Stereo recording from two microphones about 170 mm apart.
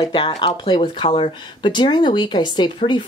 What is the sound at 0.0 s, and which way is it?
Speech, 25° left (ahead or behind).